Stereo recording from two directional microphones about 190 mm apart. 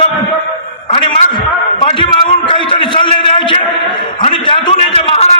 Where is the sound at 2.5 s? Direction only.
25° left (ahead or behind).